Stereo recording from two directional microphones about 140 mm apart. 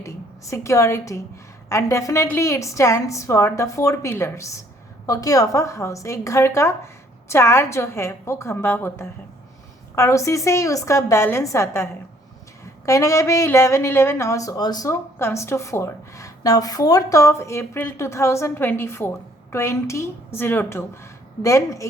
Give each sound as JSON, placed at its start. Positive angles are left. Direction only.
{"t": 0.0, "sound": "a woman's voice", "side_deg": 20}